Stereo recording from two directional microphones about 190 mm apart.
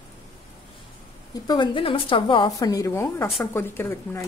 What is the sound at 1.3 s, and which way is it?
A woman's voice, 25° left (ahead or behind).